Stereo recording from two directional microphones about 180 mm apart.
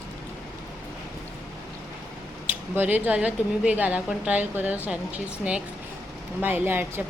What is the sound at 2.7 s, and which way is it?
A woman's voice, 10° right (ahead or behind).